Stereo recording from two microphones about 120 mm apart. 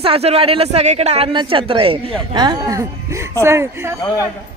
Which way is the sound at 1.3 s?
45° right (ahead or behind).